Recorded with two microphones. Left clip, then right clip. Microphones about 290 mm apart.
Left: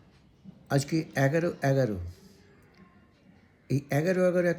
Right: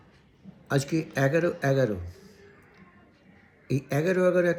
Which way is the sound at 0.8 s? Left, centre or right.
Centre.